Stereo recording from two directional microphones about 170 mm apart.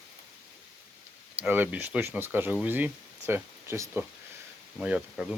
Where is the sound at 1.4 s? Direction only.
10° right (ahead or behind).